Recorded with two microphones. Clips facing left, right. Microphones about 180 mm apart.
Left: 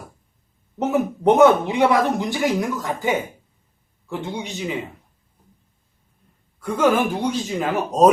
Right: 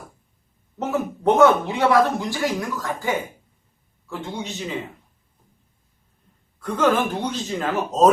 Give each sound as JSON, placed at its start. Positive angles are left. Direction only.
{"t": 0.8, "sound": "a man's voice", "side_deg": 15}
{"t": 6.6, "sound": "a man's voice", "side_deg": 10}